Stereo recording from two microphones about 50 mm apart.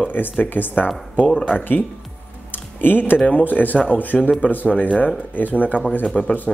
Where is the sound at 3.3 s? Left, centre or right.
Left.